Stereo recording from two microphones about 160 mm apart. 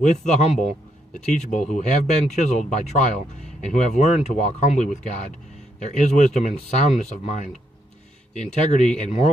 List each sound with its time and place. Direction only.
0.3 s speech: 45° left (ahead or behind)
8.5 s speech: 50° left (ahead or behind)